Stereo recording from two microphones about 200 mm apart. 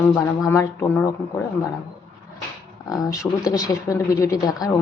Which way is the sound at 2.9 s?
15° left (ahead or behind).